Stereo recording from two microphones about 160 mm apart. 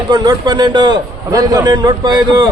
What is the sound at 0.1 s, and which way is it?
A man's voice, 25° right (ahead or behind).